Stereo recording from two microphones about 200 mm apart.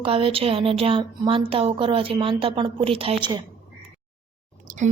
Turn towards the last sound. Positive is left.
turn(degrees=-35)  # may be behind; listen again after turning